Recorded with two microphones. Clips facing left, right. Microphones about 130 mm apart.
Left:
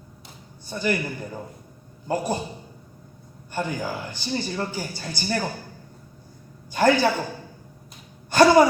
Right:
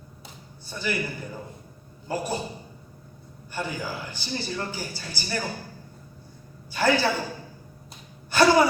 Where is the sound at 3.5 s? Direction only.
15° left (ahead or behind).